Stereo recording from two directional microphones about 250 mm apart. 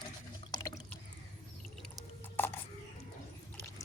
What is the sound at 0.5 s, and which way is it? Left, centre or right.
Drip, centre.